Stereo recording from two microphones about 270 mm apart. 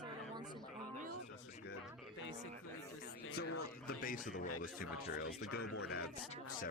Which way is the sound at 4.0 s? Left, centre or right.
Left.